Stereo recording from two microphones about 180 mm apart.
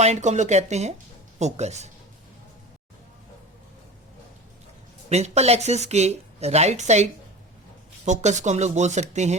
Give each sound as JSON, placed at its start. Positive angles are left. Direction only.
{"t": 0.0, "sound": "speech", "side_deg": -40}
{"t": 5.0, "sound": "speech", "side_deg": -35}